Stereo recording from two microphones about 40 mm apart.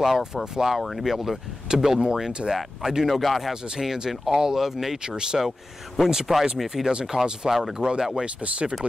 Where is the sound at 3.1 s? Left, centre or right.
Centre.